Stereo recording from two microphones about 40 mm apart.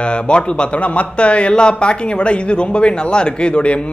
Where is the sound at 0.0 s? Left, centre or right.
Left.